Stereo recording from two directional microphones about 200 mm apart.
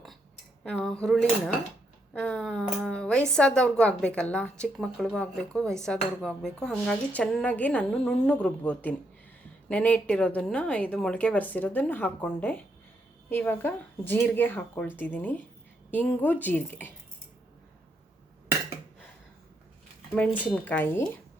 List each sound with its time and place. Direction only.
0.6 s a woman's voice: centre (ahead or behind)
20.1 s a woman's voice: 5° left (ahead or behind)